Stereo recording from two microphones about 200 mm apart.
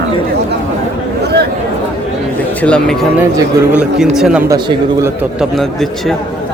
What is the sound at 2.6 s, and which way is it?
A man's voice, 5° left (ahead or behind).